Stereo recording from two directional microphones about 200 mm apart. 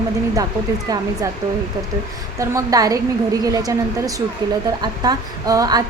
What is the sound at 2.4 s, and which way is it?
A woman's voice, 15° right (ahead or behind).